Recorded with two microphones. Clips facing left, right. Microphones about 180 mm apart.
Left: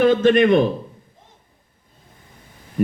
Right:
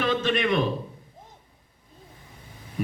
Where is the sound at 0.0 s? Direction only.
50° left (ahead or behind).